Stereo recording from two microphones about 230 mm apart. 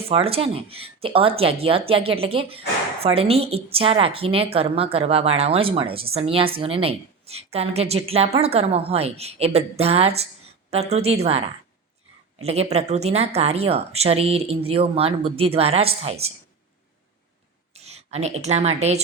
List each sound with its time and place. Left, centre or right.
0.1 s speech: right
17.7 s speech: right